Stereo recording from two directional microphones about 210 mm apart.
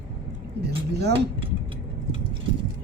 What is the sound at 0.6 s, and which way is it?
Speech, 50° right (ahead or behind).